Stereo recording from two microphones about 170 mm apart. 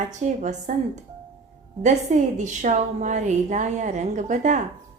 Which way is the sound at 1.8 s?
45° right (ahead or behind).